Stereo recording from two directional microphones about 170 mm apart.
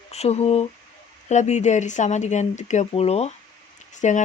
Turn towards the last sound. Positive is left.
turn(degrees=45)  # may be behind; listen again after turning